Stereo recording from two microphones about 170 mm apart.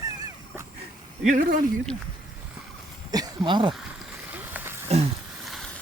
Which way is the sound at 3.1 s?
25° right (ahead or behind).